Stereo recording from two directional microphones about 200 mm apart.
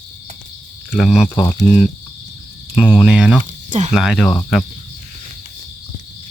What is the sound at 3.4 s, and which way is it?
Cricket, 35° right (ahead or behind).